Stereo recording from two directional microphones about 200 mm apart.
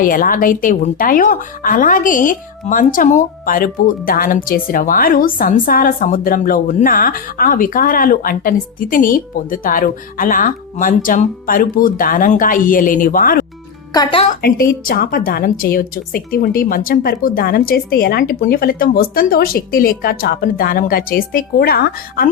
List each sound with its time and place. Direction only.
0.0 s speech: 45° left (ahead or behind)
13.9 s speech: 20° left (ahead or behind)
14.4 s speech: 45° left (ahead or behind)